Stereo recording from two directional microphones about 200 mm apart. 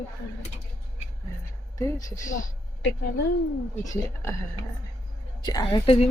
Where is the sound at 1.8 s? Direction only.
15° left (ahead or behind).